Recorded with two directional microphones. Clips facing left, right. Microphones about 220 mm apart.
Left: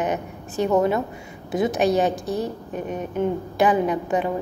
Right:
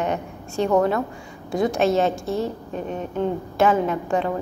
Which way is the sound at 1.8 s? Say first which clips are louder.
Even; 15° left (ahead or behind).